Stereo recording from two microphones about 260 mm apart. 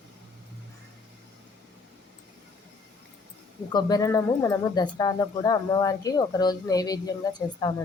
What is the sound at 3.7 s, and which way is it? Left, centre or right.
Speech, centre.